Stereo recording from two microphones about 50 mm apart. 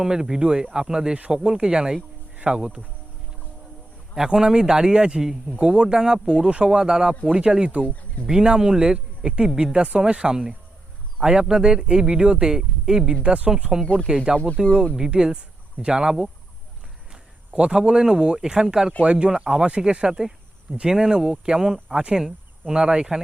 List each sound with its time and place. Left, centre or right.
0.0 s speech: centre
4.1 s speech: centre
13.2 s speech: right
14.3 s speech: centre
15.1 s speech: centre
17.7 s speech: centre